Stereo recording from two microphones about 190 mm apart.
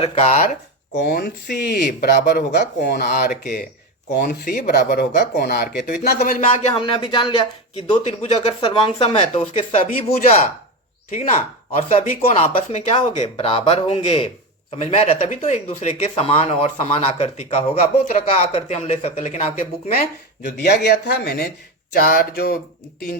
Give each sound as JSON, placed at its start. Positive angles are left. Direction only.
{"t": 0.0, "sound": "speech", "side_deg": 35}
{"t": 0.9, "sound": "speech", "side_deg": 55}
{"t": 6.5, "sound": "speech", "side_deg": 30}
{"t": 7.9, "sound": "speech", "side_deg": 35}
{"t": 11.8, "sound": "speech", "side_deg": 35}
{"t": 20.4, "sound": "speech", "side_deg": 55}
{"t": 21.9, "sound": "a sound", "side_deg": 50}